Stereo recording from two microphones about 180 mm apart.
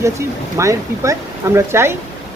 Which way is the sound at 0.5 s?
15° right (ahead or behind).